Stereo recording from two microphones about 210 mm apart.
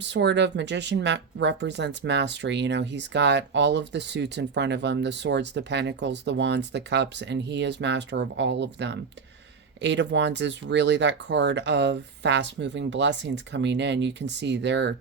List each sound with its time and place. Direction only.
0.0 s speech: 55° right (ahead or behind)